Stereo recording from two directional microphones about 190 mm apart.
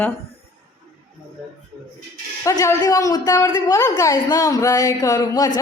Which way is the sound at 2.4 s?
15° left (ahead or behind).